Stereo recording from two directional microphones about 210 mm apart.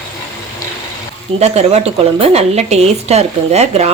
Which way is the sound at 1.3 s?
30° right (ahead or behind).